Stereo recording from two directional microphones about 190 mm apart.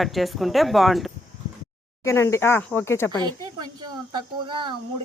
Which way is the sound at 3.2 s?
20° right (ahead or behind).